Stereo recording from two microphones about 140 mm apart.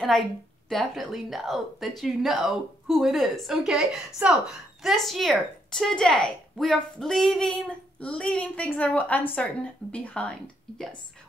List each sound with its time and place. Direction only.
0.7 s speech: centre (ahead or behind)